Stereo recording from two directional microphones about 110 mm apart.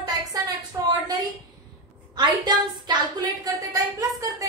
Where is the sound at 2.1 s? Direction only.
40° right (ahead or behind).